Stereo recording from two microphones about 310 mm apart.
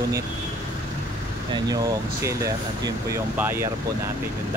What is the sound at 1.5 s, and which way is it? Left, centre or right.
Speech, centre.